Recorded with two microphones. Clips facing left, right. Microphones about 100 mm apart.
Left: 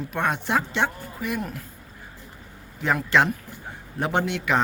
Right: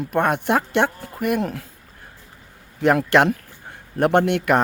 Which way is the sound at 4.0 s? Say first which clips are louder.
Right 8 dB; 60° right (ahead or behind).